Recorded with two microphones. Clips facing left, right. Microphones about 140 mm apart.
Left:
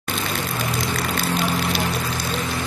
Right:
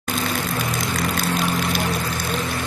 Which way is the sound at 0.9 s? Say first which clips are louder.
Right 2 dB; 45° right (ahead or behind).